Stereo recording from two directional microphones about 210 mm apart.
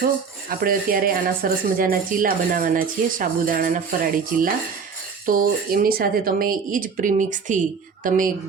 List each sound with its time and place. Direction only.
0.6 s speech: 45° right (ahead or behind)